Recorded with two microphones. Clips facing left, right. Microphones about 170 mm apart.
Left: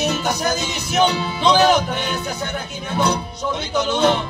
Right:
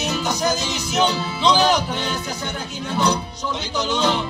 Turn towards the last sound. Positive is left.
turn(degrees=55)  # may be behind; listen again after turning